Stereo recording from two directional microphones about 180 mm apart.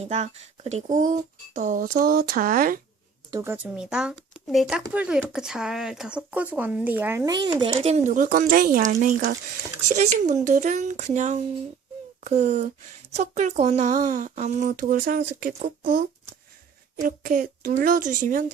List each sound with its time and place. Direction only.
0.0 s speech: 35° right (ahead or behind)
3.3 s speech: 10° right (ahead or behind); by 18.5 s 45° right (ahead or behind)